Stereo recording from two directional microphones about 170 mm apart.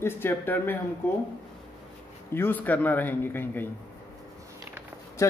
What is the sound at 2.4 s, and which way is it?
Speech, 10° left (ahead or behind).